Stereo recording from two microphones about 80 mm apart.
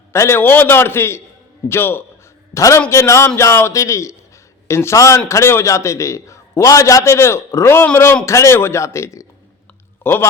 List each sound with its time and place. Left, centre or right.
0.1 s a man's voice: left
0.3 s a man's voice: left
2.5 s a man's voice: left